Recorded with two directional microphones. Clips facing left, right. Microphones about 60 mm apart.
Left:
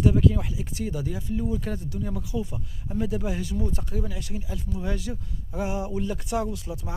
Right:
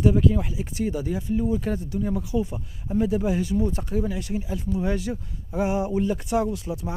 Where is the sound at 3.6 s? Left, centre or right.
Right.